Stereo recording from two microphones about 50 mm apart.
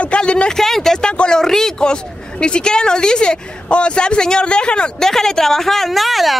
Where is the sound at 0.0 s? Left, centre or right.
Left.